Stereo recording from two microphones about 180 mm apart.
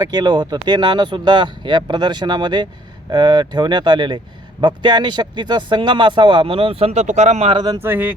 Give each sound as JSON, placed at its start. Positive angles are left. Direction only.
{"t": 0.0, "sound": "speech", "side_deg": -25}